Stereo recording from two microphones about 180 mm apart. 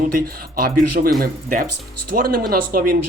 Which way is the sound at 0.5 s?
55° right (ahead or behind).